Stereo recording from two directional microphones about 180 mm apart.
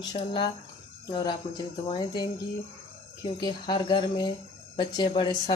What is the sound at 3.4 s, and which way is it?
Speech, 25° left (ahead or behind).